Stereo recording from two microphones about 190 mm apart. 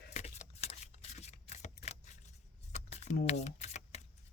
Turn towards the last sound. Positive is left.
turn(degrees=35)  # may be behind; listen again after turning